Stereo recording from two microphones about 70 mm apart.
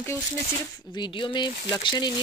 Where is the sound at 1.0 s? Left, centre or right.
Left.